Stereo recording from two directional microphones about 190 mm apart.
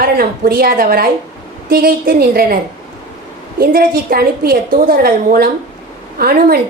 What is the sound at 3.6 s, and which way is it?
A woman's voice, 50° right (ahead or behind).